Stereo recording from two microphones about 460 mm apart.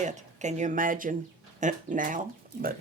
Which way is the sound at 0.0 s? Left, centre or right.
Centre.